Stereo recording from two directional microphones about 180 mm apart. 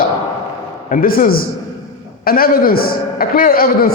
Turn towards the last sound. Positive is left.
turn(degrees=55)  # may be behind; listen again after turning